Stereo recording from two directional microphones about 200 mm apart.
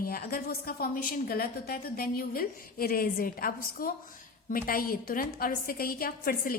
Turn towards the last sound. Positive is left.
turn(degrees=45)  # may be behind; listen again after turning